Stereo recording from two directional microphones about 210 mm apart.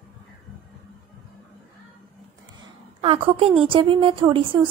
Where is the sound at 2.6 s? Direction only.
25° right (ahead or behind).